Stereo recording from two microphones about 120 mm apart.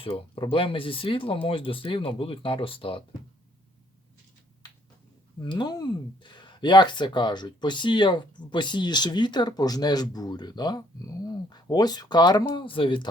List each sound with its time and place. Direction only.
0.0 s speech: 50° left (ahead or behind)
5.4 s speech: 40° left (ahead or behind)